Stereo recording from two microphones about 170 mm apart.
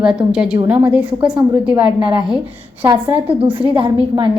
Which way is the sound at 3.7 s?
30° right (ahead or behind).